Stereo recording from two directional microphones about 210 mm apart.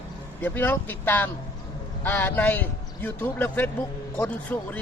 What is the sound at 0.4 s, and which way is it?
A man's voice, 10° left (ahead or behind).